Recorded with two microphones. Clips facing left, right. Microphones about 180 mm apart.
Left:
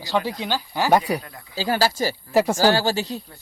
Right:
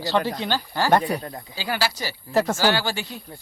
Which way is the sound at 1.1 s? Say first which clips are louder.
Left 1 dB; 35° right (ahead or behind).